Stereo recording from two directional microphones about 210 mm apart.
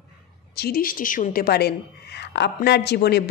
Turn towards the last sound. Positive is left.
turn(degrees=50)  # may be behind; listen again after turning